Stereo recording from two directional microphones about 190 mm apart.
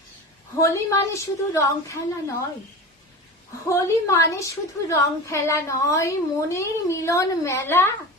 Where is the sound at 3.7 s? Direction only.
15° left (ahead or behind).